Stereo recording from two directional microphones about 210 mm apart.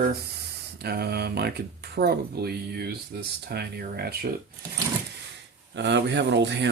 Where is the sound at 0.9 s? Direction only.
50° right (ahead or behind).